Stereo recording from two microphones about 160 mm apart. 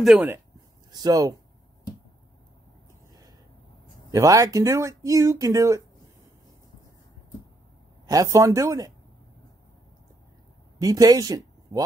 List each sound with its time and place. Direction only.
0.0 s speech: centre (ahead or behind)
0.9 s speech: 25° right (ahead or behind)
4.1 s speech: 20° right (ahead or behind)
8.1 s speech: 20° right (ahead or behind)
10.8 s speech: 25° right (ahead or behind)